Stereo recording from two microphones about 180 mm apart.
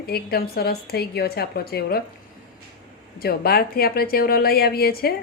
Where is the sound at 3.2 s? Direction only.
60° left (ahead or behind).